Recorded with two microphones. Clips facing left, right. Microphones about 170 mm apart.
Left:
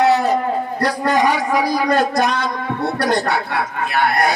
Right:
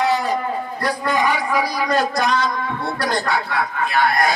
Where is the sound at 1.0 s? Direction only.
45° left (ahead or behind).